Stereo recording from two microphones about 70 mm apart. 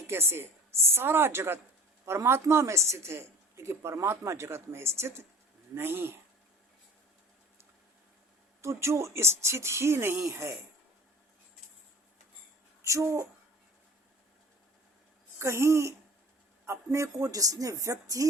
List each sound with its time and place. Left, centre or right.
0.1 s a woman's voice: right
8.6 s speech: right
12.8 s speech: right
15.4 s speech: right